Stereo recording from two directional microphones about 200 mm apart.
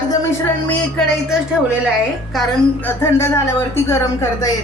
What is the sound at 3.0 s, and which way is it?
Speech, 15° left (ahead or behind).